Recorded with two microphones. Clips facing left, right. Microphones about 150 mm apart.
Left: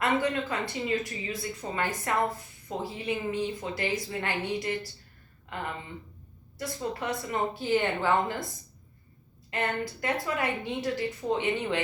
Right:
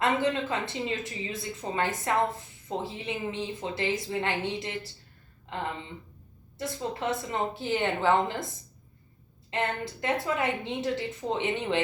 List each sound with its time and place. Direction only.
0.0 s a woman's voice: 25° right (ahead or behind)
9.5 s a woman's voice: 25° right (ahead or behind)